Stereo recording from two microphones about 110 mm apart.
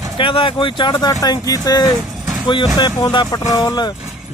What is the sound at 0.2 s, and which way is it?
Speech, 50° left (ahead or behind).